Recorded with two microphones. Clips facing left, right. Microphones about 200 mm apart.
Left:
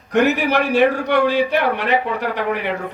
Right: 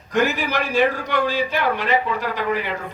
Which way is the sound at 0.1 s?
65° left (ahead or behind).